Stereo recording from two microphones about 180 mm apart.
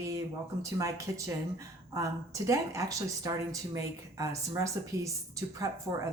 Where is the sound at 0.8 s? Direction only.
15° right (ahead or behind).